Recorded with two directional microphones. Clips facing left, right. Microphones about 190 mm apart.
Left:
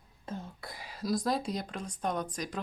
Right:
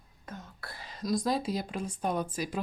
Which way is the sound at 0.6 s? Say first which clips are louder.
Right 2 dB; 15° left (ahead or behind).